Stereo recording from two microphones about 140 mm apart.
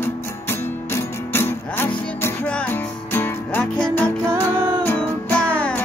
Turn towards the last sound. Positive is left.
turn(degrees=10)  # may be behind; listen again after turning